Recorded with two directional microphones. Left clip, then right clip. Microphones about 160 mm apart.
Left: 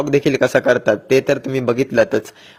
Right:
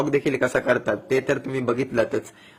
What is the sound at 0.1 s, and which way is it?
A man's voice, 40° left (ahead or behind).